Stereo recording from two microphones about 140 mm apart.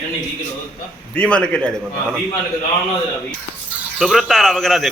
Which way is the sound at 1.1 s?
10° left (ahead or behind).